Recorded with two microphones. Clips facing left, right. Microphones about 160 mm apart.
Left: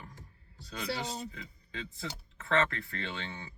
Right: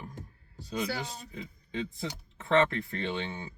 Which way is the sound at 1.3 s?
20° right (ahead or behind).